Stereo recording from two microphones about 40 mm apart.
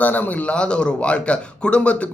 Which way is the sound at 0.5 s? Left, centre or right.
Left.